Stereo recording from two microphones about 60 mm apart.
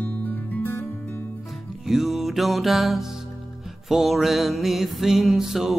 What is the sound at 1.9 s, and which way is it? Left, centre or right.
Music, centre.